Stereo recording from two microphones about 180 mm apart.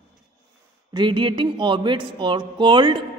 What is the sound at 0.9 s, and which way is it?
Speech, 25° right (ahead or behind).